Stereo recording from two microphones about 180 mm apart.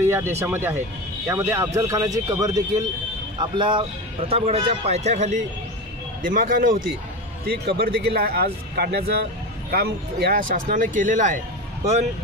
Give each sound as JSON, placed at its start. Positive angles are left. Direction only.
{"t": 0.0, "sound": "speech", "side_deg": -15}
{"t": 6.2, "sound": "speech", "side_deg": -50}
{"t": 7.4, "sound": "speech", "side_deg": -60}